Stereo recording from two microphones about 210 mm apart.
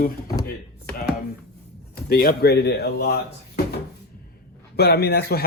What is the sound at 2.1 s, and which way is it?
Speech, 45° left (ahead or behind).